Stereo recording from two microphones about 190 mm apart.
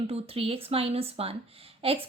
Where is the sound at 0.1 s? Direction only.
30° right (ahead or behind).